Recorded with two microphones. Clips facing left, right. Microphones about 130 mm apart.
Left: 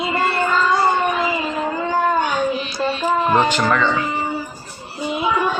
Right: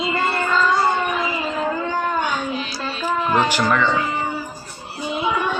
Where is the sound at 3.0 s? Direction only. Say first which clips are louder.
Left 2 dB; 20° left (ahead or behind).